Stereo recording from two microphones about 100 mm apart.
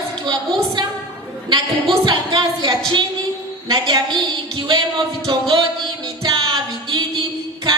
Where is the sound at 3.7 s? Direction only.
55° right (ahead or behind).